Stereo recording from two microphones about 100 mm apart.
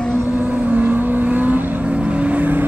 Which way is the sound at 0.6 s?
10° right (ahead or behind).